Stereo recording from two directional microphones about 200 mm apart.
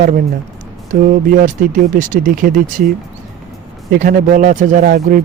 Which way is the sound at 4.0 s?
40° right (ahead or behind).